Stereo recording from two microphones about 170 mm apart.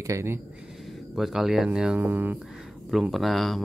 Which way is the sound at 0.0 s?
15° right (ahead or behind).